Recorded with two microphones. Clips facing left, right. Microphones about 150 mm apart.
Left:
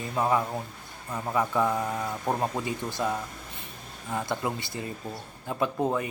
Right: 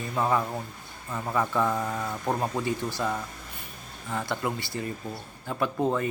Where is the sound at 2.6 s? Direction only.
20° left (ahead or behind).